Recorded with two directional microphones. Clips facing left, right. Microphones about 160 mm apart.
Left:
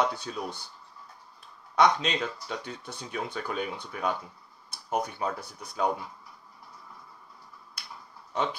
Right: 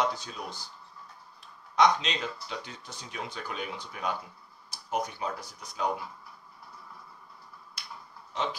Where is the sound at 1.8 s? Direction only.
55° left (ahead or behind).